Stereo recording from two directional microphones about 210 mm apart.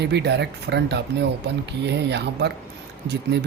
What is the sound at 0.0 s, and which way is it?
Speech, 55° right (ahead or behind).